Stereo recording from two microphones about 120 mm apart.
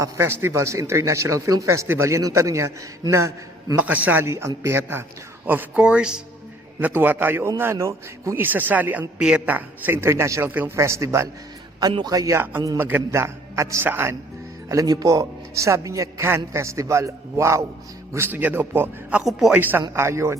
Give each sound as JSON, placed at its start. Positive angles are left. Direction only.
{"t": 0.0, "sound": "speech", "side_deg": -20}
{"t": 3.9, "sound": "a man's voice", "side_deg": -15}
{"t": 14.7, "sound": "speech", "side_deg": -30}
{"t": 19.2, "sound": "a man's voice", "side_deg": 0}
{"t": 19.5, "sound": "a man's voice", "side_deg": -15}